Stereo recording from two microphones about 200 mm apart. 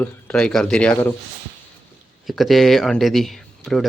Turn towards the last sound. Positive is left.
turn(degrees=0)  # may be behind; listen again after turning